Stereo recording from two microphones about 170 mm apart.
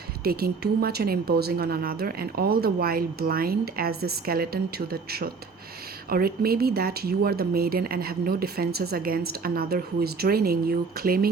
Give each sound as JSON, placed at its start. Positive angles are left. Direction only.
{"t": 0.3, "sound": "speech", "side_deg": -65}